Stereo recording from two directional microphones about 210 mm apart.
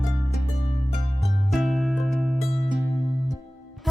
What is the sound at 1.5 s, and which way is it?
Music, centre (ahead or behind).